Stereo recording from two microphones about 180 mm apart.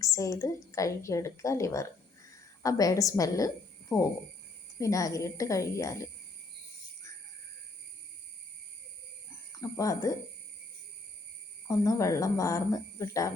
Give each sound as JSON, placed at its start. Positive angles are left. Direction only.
{"t": 0.0, "sound": "a woman's voice", "side_deg": 15}
{"t": 9.6, "sound": "a woman's voice", "side_deg": 20}
{"t": 11.7, "sound": "a woman's voice", "side_deg": 20}